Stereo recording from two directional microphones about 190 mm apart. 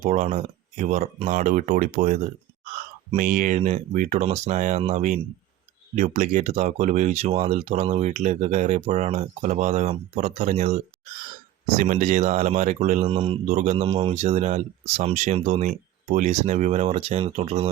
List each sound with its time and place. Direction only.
0.0 s speech: 40° right (ahead or behind)
13.8 s speech: 30° right (ahead or behind)